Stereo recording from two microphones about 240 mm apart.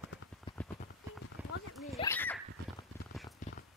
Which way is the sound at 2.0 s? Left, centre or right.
Centre.